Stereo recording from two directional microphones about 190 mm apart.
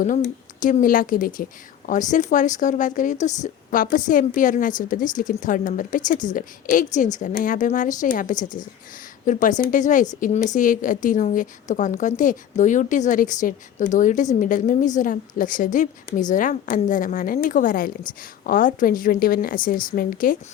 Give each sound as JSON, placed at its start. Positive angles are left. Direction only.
{"t": 0.6, "sound": "a woman's voice", "side_deg": 45}